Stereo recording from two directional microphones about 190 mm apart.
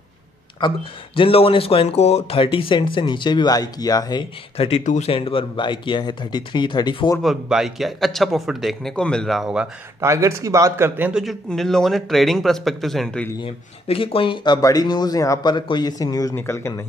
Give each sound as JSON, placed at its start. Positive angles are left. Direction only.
{"t": 0.6, "sound": "speech", "side_deg": 25}
{"t": 7.2, "sound": "a man's voice", "side_deg": 0}
{"t": 9.9, "sound": "a man's voice", "side_deg": -15}
{"t": 13.4, "sound": "speech", "side_deg": 30}